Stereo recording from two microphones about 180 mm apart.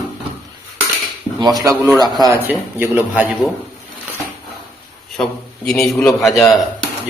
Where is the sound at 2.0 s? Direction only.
20° right (ahead or behind).